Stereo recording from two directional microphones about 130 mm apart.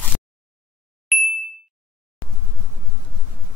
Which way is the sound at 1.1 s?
Centre (ahead or behind).